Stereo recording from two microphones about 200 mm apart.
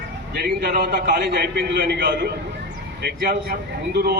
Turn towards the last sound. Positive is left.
turn(degrees=-55)  # may be behind; listen again after turning